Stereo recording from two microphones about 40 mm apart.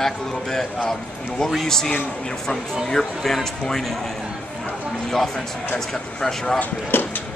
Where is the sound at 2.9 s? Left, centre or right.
Centre.